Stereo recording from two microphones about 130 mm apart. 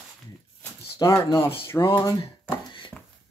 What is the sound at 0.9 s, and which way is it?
Speech, 25° left (ahead or behind).